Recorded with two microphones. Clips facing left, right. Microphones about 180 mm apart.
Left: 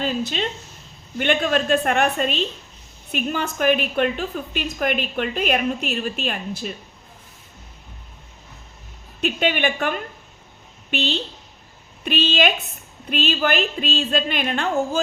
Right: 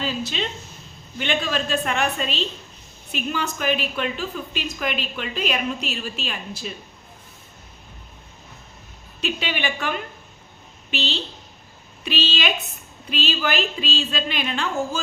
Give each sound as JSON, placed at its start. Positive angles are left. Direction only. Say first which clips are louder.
{"t": 0.0, "sound": "a woman's voice", "louder": "left 3 dB", "side_deg": 50}
{"t": 9.2, "sound": "a woman's voice", "louder": "left 5 dB", "side_deg": 50}